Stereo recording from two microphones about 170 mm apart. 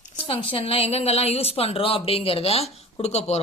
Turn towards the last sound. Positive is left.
turn(degrees=40)  # may be behind; listen again after turning